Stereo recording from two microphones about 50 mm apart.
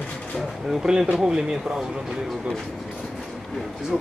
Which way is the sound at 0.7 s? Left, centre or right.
Centre.